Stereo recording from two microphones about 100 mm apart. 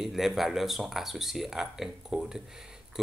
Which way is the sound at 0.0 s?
Centre (ahead or behind).